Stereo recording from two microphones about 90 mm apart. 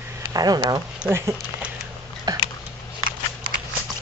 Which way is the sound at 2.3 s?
50° right (ahead or behind).